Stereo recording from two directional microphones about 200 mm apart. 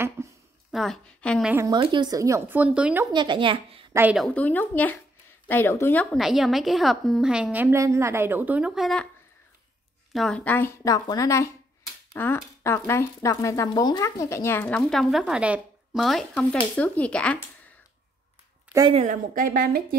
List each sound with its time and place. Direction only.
0.2 s a sound: 15° right (ahead or behind)
0.7 s a woman's voice: centre (ahead or behind)
1.5 s speech: 15° right (ahead or behind)
3.1 s speech: 25° right (ahead or behind)
3.9 s speech: 5° right (ahead or behind)
4.3 s speech: 10° left (ahead or behind)
6.1 s a woman's voice: centre (ahead or behind)
10.1 s a woman's voice: 5° left (ahead or behind)
18.7 s speech: 20° right (ahead or behind)
18.9 s a woman's voice: 40° right (ahead or behind)